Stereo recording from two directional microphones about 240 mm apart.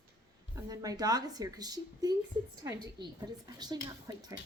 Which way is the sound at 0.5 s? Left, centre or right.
Centre.